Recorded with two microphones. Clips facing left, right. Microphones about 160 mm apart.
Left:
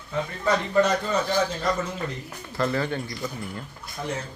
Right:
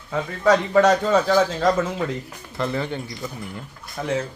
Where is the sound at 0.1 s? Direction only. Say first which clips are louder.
Right 6 dB; 90° right.